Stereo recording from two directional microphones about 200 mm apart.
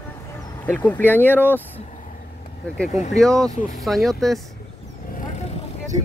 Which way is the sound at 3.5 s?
40° left (ahead or behind).